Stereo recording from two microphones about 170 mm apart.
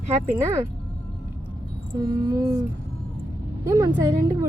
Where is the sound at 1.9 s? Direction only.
20° right (ahead or behind).